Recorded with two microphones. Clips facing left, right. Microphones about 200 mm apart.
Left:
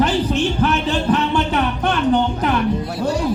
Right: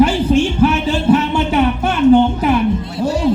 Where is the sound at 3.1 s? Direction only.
25° right (ahead or behind).